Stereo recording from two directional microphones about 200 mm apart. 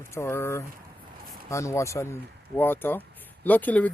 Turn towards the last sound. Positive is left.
turn(degrees=10)  # may be behind; listen again after turning